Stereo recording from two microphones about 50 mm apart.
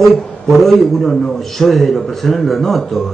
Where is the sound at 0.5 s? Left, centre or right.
Centre.